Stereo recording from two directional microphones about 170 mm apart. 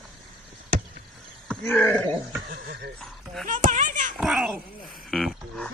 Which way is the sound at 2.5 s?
65° right (ahead or behind).